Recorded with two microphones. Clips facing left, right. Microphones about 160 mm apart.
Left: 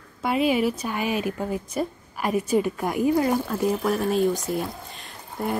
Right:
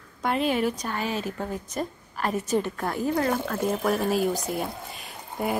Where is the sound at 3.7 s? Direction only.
Centre (ahead or behind).